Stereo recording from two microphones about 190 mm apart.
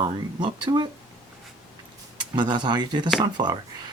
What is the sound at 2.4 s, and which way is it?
Speech, 25° right (ahead or behind).